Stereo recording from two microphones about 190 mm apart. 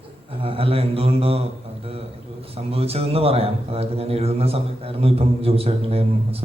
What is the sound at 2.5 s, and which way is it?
A man's voice, 30° right (ahead or behind).